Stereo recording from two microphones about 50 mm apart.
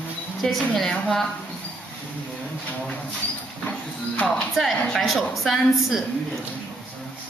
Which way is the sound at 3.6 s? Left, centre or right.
Left.